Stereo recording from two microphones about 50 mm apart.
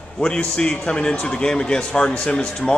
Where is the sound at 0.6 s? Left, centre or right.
Centre.